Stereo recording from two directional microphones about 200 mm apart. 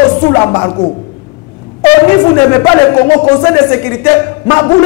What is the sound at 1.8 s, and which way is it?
Speech, 15° left (ahead or behind).